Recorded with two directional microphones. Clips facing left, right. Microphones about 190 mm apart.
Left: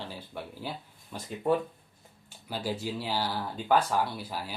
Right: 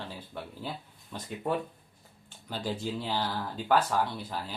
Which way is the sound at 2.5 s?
10° left (ahead or behind).